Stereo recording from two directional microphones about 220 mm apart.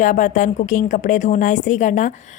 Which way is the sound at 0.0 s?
35° left (ahead or behind).